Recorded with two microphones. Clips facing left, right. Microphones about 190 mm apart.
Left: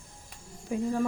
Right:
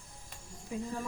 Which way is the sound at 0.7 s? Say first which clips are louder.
Left 7 dB; 60° left (ahead or behind).